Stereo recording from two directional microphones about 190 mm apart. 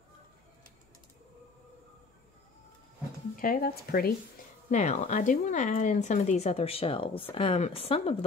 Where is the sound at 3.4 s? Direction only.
50° left (ahead or behind).